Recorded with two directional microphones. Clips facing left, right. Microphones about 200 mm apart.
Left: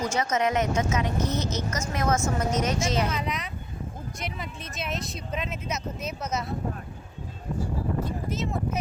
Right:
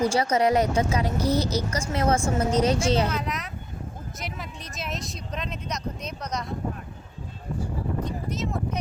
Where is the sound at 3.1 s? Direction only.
Centre (ahead or behind).